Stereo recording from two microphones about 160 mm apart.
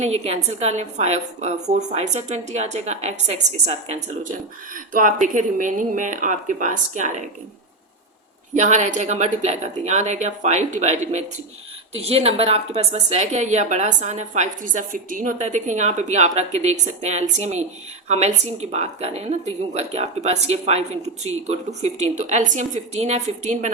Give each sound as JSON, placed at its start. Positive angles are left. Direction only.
{"t": 0.0, "sound": "a woman's voice", "side_deg": -45}
{"t": 8.5, "sound": "a woman's voice", "side_deg": -50}